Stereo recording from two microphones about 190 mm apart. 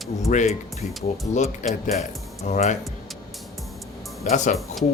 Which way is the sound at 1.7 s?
35° left (ahead or behind).